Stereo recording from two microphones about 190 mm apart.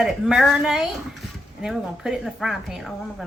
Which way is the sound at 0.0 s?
Centre (ahead or behind).